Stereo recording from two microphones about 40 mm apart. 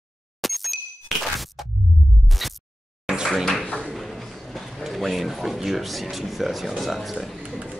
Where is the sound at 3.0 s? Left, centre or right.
Centre.